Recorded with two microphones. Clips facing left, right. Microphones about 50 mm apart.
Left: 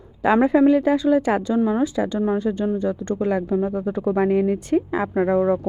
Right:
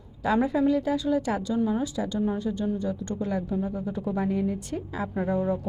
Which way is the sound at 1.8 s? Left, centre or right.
Left.